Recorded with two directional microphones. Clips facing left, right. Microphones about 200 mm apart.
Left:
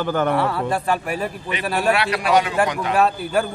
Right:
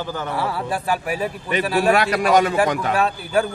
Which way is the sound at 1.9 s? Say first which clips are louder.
Right 2 dB; 45° right (ahead or behind).